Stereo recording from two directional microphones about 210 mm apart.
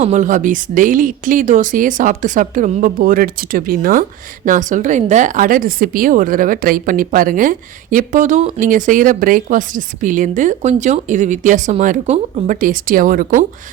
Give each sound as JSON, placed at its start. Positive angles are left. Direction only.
{"t": 0.0, "sound": "a woman's voice", "side_deg": -35}